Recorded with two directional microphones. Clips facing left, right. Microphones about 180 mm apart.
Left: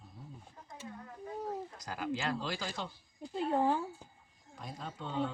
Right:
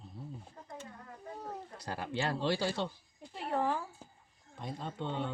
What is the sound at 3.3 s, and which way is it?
Speech, 25° left (ahead or behind).